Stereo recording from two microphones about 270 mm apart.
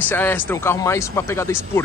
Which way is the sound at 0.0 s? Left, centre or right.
Centre.